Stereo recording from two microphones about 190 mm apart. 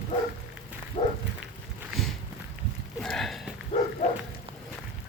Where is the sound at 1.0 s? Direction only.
35° left (ahead or behind).